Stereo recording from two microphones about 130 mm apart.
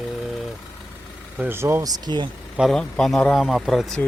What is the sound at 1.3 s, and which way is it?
Speech, 15° right (ahead or behind).